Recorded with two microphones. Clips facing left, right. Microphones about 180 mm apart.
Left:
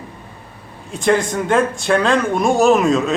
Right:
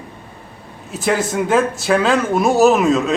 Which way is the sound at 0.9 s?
5° right (ahead or behind).